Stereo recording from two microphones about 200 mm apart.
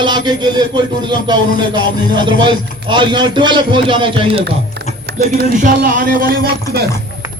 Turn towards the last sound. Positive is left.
turn(degrees=-45)  # may be behind; listen again after turning